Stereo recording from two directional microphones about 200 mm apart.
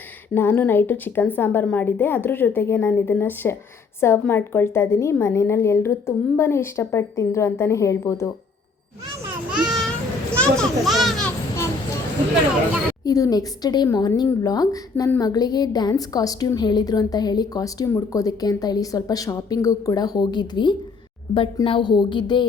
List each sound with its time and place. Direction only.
0.3 s a woman's voice: 10° left (ahead or behind)
9.5 s a sound: 5° right (ahead or behind)
10.3 s a child's voice: 5° left (ahead or behind)
13.1 s a woman's voice: 15° left (ahead or behind)